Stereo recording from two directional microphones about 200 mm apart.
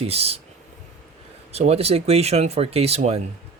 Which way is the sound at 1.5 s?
30° right (ahead or behind).